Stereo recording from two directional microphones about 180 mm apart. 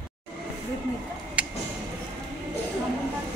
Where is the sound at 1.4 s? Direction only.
5° right (ahead or behind).